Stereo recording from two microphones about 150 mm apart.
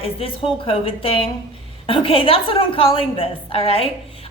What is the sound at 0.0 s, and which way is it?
A woman's voice, 35° left (ahead or behind).